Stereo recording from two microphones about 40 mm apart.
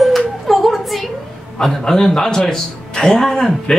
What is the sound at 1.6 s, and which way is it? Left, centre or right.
Speech, centre.